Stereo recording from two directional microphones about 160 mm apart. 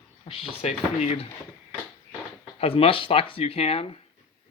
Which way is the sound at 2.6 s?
35° left (ahead or behind).